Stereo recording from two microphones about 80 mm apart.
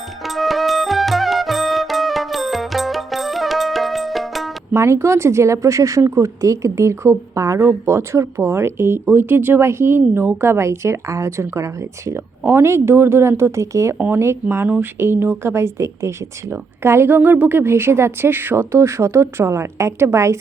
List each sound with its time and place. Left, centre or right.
0.2 s music: centre
4.7 s speech: right
12.4 s speech: right